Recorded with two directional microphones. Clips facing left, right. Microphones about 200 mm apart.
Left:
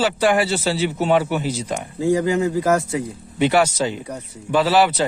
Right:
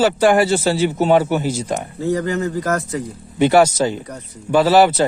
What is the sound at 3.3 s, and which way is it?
A man's voice, 45° right (ahead or behind).